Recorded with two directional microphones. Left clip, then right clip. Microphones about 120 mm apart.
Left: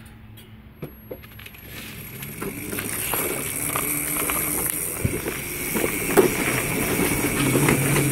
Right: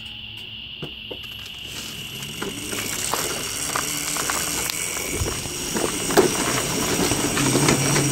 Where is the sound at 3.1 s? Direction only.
40° right (ahead or behind).